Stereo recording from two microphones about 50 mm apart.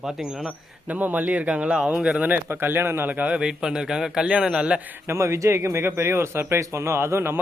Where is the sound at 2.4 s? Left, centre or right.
Right.